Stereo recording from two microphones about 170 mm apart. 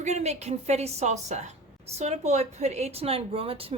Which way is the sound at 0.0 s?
40° right (ahead or behind).